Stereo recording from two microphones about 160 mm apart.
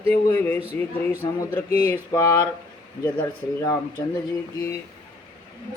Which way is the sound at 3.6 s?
20° left (ahead or behind).